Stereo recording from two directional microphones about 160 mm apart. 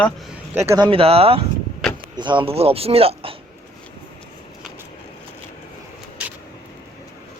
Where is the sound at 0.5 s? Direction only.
15° right (ahead or behind).